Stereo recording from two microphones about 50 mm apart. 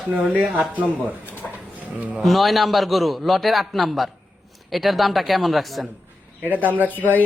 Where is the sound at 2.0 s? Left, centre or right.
Right.